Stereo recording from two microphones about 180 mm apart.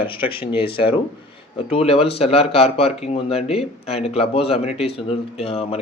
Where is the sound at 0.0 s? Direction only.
30° left (ahead or behind).